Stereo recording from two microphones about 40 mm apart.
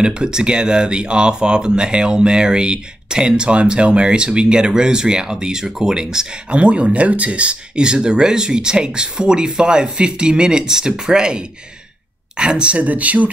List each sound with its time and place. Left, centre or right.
0.0 s speech: centre
6.5 s speech: right